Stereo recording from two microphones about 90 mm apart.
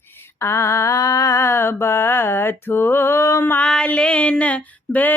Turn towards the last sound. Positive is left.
turn(degrees=15)  # may be behind; listen again after turning